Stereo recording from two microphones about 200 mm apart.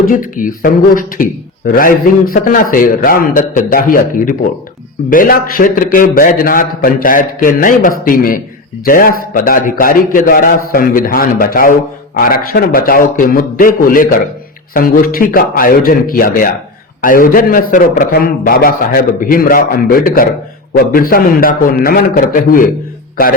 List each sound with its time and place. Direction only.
0.0 s a man's voice: 40° left (ahead or behind)